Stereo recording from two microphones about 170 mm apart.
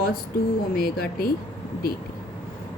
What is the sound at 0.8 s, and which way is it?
Speech, 65° left (ahead or behind).